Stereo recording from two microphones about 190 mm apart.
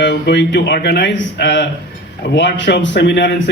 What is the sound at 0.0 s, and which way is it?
A man's voice, 65° left (ahead or behind).